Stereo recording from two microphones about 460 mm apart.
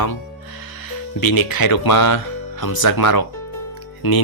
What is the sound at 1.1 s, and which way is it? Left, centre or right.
Speech, left.